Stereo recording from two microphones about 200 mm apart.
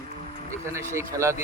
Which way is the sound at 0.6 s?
15° right (ahead or behind).